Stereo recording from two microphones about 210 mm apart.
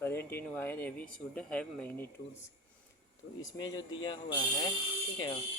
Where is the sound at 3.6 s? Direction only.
20° left (ahead or behind).